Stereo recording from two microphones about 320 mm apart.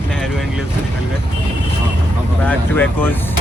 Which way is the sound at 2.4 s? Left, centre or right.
Centre.